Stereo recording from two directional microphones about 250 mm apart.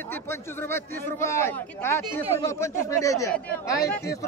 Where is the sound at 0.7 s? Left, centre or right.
Centre.